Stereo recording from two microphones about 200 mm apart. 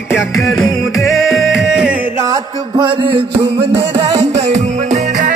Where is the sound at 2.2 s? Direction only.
20° right (ahead or behind).